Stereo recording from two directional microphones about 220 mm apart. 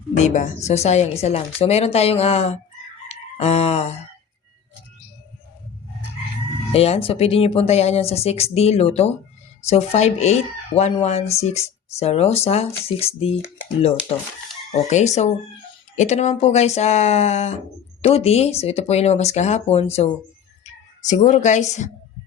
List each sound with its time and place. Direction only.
0.2 s speech: 35° left (ahead or behind)
3.1 s a sound: 30° left (ahead or behind)
6.7 s speech: 25° left (ahead or behind)
14.8 s speech: 30° left (ahead or behind)